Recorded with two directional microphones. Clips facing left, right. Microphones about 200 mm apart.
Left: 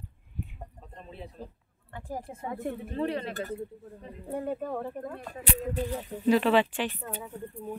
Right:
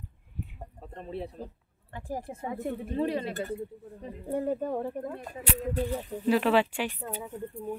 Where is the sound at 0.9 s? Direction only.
65° right (ahead or behind).